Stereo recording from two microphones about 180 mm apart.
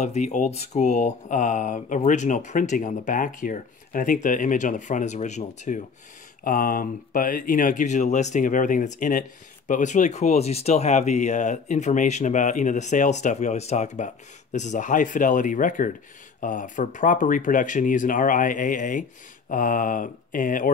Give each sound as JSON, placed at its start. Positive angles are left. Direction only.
{"t": 0.0, "sound": "speech", "side_deg": 40}